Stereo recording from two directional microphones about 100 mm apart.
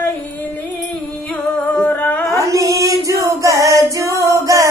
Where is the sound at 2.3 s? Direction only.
35° right (ahead or behind).